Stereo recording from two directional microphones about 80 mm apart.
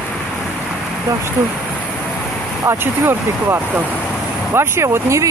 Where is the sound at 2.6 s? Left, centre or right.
Right.